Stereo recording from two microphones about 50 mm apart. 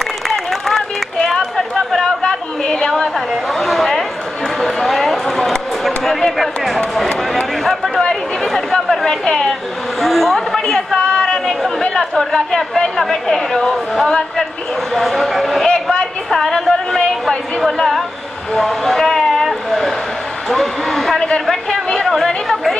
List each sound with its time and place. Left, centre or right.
0.3 s chatter: centre
4.6 s a sound: centre
8.0 s a man's voice: centre
11.1 s chatter: centre
12.0 s a man's voice: centre
15.6 s a sound: centre
16.3 s speech: centre
18.5 s speech: centre
19.4 s a sound: centre
20.4 s a man's voice: centre
21.5 s chatter: centre